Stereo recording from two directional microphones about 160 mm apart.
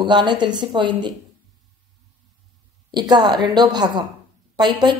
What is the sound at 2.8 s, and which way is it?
A woman's voice, 25° right (ahead or behind).